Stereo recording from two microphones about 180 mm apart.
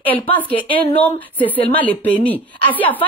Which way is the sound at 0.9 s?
10° left (ahead or behind).